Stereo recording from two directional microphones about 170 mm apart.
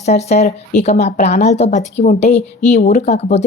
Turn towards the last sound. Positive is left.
turn(degrees=40)  # may be behind; listen again after turning